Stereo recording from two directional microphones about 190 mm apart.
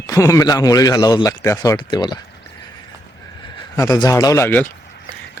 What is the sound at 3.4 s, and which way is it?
Speech, 25° left (ahead or behind).